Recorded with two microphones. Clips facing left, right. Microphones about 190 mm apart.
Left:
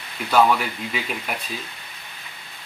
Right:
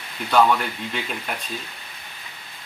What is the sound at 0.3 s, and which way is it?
Speech, 5° left (ahead or behind).